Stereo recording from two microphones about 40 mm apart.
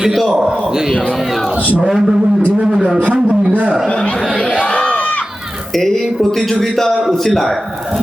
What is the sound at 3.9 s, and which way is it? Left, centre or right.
Speech, left.